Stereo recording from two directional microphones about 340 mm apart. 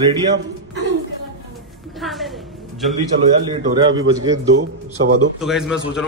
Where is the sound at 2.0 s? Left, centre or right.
Centre.